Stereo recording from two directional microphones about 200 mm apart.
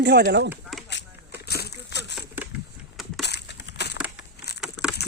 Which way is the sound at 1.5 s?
55° left (ahead or behind).